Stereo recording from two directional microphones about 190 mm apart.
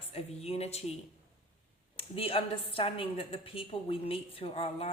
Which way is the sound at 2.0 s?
30° left (ahead or behind).